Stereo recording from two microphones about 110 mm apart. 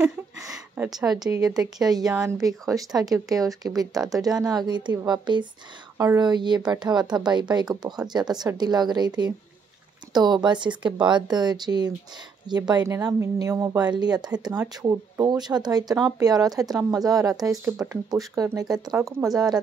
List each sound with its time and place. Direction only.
1.2 s speech: 35° right (ahead or behind)
12.8 s speech: 25° right (ahead or behind)
13.4 s speech: 35° right (ahead or behind)